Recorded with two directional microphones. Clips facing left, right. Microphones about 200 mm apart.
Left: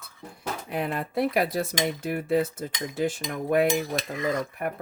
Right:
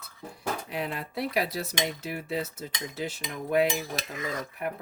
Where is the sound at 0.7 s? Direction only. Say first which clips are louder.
Left 4 dB; 50° left (ahead or behind).